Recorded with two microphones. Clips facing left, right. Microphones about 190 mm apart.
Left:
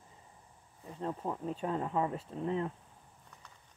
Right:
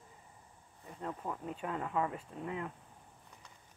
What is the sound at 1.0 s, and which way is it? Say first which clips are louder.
Speech: left 4 dB; 20° left (ahead or behind).